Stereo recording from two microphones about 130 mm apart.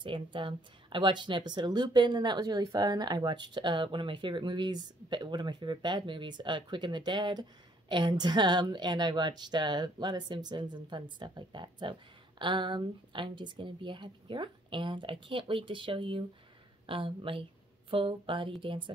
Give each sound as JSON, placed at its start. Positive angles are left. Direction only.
{"t": 0.0, "sound": "a woman's voice", "side_deg": -40}